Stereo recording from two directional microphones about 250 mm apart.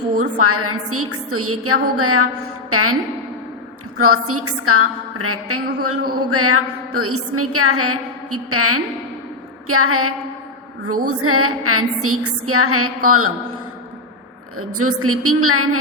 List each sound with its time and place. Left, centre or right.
0.2 s a woman's voice: right
14.6 s a woman's voice: right